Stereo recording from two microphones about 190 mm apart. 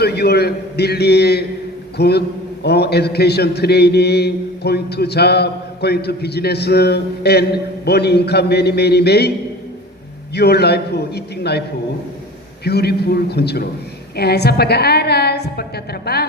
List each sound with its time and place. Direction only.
0.0 s a man's voice: 60° left (ahead or behind)
10.3 s a man's voice: 60° left (ahead or behind)
12.6 s a man's voice: 60° left (ahead or behind)